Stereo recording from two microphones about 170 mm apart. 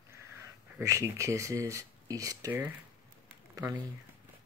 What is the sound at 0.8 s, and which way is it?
Speech, 15° right (ahead or behind).